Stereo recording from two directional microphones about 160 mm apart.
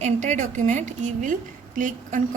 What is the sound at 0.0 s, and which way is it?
A woman's voice, 50° right (ahead or behind).